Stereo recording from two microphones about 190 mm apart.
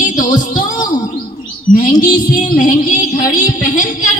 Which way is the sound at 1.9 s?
20° left (ahead or behind).